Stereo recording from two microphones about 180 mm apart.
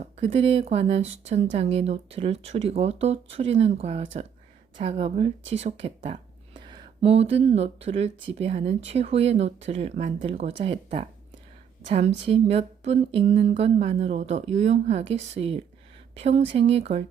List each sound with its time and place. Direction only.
0.0 s speech: 35° right (ahead or behind)